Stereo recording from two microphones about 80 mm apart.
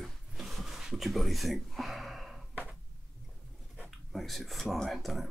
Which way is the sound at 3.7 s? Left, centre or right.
Centre.